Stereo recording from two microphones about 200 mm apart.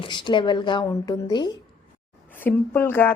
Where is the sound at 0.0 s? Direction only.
25° left (ahead or behind).